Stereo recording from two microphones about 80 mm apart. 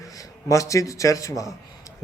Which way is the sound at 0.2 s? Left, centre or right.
Left.